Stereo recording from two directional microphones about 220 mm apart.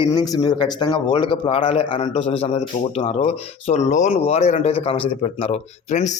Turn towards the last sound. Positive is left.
turn(degrees=30)  # may be behind; listen again after turning